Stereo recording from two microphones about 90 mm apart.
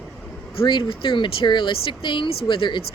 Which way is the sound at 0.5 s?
70° left (ahead or behind).